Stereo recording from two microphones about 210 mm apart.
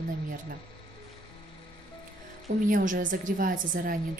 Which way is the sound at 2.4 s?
40° right (ahead or behind).